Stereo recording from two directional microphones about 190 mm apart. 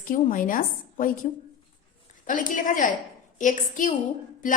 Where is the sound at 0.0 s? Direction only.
45° left (ahead or behind).